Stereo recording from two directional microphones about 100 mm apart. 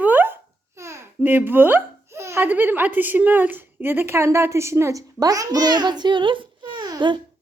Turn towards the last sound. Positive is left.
turn(degrees=-50)  # may be behind; listen again after turning